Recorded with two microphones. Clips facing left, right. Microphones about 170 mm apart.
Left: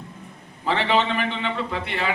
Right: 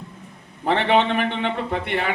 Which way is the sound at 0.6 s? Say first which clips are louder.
Right 3 dB; 55° right (ahead or behind).